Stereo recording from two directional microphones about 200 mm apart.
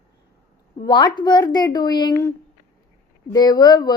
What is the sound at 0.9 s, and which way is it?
A woman's voice, 20° left (ahead or behind).